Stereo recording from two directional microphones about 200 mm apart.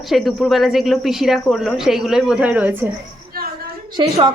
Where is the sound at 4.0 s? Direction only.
25° right (ahead or behind).